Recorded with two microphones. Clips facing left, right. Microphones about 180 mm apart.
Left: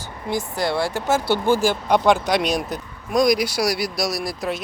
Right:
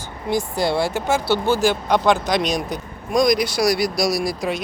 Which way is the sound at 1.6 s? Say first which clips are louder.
Even; 10° left (ahead or behind).